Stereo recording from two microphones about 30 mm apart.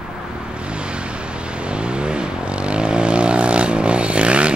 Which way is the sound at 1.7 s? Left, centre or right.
Right.